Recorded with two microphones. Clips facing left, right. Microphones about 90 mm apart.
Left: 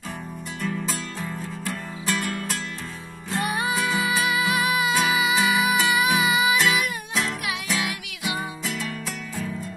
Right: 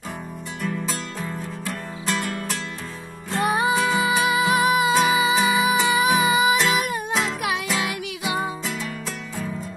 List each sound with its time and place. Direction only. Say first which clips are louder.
0.6 s music: right 1 dB; centre (ahead or behind)
2.0 s music: right 1 dB; 20° right (ahead or behind); by 7.2 s 35° right (ahead or behind)